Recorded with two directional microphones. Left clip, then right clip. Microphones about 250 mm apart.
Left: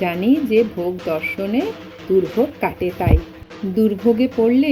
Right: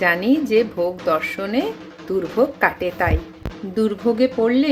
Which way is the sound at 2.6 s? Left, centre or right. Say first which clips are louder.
Right 2 dB; centre.